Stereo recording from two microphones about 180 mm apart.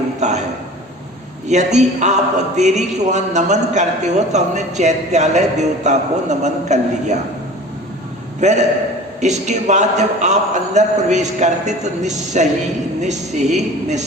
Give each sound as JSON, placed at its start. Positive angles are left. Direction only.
{"t": 0.2, "sound": "a sound", "side_deg": -40}
{"t": 1.5, "sound": "a man's voice", "side_deg": -40}
{"t": 8.4, "sound": "a man's voice", "side_deg": -40}